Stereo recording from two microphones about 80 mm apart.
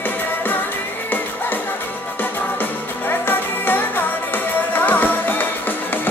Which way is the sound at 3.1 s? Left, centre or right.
Left.